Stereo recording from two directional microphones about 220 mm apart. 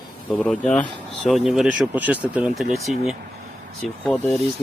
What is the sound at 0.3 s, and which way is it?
Speech, 5° left (ahead or behind).